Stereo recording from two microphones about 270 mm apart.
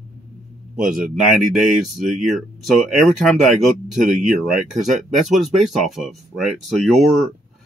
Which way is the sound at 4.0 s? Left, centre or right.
Right.